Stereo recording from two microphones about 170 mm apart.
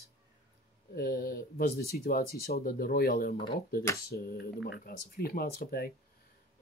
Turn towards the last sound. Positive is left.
turn(degrees=65)  # may be behind; listen again after turning